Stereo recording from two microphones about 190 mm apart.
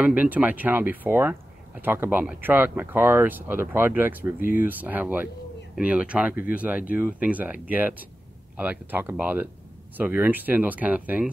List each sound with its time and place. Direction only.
0.0 s speech: 10° right (ahead or behind)
4.4 s speech: 45° left (ahead or behind)
4.6 s speech: 10° right (ahead or behind)